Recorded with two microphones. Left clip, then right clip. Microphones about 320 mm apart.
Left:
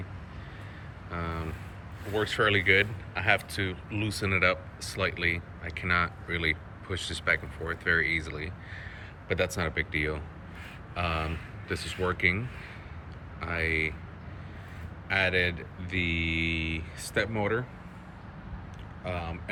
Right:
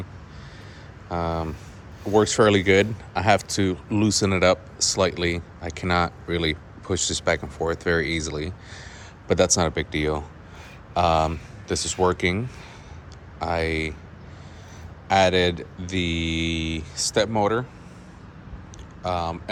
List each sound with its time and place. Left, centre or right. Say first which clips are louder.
1.1 s speech: right 9 dB; centre
13.4 s speech: right 4 dB; centre
15.0 s speech: right 8 dB; centre
19.0 s speech: right 10 dB; centre